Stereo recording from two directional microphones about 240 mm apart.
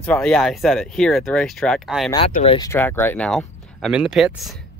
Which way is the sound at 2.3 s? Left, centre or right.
Left.